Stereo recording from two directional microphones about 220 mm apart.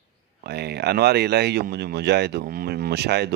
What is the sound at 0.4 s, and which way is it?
Speech, 50° right (ahead or behind).